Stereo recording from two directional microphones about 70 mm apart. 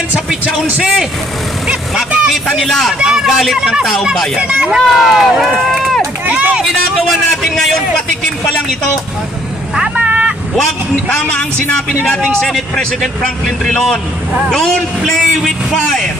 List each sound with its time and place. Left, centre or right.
2.1 s speech: centre
2.6 s speech: centre
3.0 s speech: centre
6.2 s speech: right
7.1 s speech: centre
10.0 s vehicle: right
12.2 s a man's voice: centre
15.1 s speech: centre